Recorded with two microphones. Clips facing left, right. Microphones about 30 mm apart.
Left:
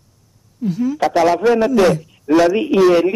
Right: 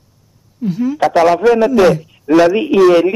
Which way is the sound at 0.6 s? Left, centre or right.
Centre.